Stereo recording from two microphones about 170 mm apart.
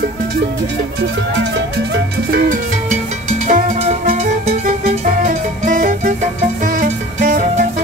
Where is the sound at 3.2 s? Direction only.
45° right (ahead or behind).